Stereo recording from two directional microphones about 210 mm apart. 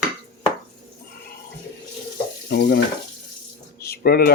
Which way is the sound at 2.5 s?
55° left (ahead or behind).